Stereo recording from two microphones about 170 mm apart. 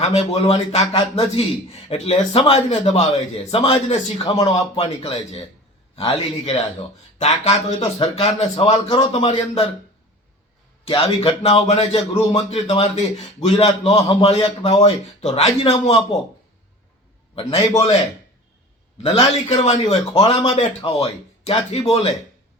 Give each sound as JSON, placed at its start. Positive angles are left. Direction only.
{"t": 0.1, "sound": "a man's voice", "side_deg": 40}
{"t": 10.8, "sound": "a man's voice", "side_deg": 35}
{"t": 17.3, "sound": "a man's voice", "side_deg": 35}
{"t": 19.0, "sound": "a man's voice", "side_deg": 40}